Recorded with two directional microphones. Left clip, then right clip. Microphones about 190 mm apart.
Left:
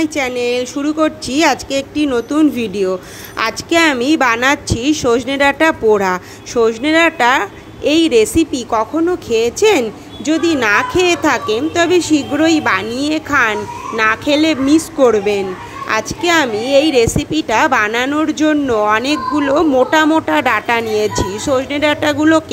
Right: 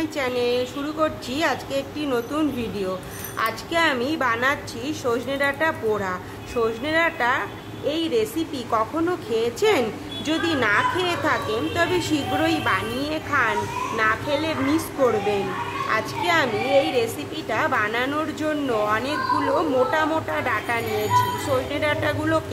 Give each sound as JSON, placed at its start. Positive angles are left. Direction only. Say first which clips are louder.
{"t": 0.0, "sound": "a woman's voice", "louder": "left 7 dB", "side_deg": 30}